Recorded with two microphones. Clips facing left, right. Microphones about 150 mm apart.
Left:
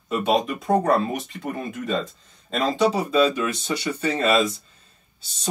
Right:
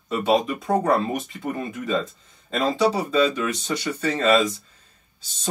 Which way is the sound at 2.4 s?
5° right (ahead or behind).